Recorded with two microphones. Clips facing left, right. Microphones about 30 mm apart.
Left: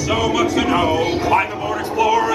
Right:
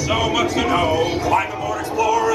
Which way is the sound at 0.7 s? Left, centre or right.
Centre.